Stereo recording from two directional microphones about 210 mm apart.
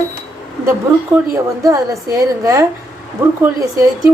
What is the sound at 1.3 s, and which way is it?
A woman's voice, 15° right (ahead or behind).